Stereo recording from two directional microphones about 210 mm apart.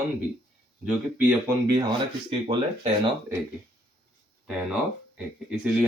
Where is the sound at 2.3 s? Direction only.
25° right (ahead or behind).